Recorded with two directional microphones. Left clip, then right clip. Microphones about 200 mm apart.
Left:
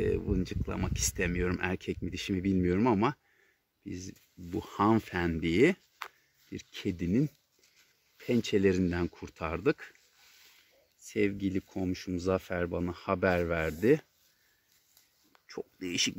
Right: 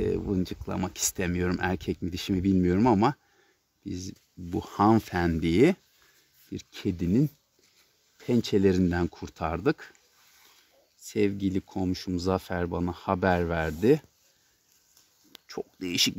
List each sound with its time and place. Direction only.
0.0 s speech: 30° right (ahead or behind)
11.0 s speech: 30° right (ahead or behind)
15.4 s speech: 25° right (ahead or behind)